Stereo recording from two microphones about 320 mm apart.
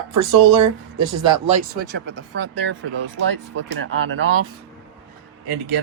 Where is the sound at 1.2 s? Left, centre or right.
Centre.